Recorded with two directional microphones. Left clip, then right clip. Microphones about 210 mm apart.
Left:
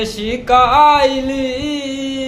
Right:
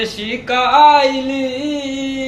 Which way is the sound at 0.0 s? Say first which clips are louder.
Left 1 dB; 25° left (ahead or behind).